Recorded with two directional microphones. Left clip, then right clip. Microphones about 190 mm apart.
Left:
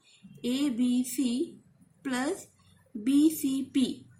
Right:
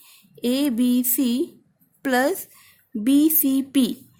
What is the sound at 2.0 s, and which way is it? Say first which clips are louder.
Speech: right 11 dB; 55° right (ahead or behind).